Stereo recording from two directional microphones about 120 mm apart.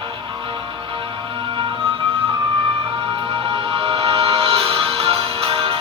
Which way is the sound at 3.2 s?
45° right (ahead or behind).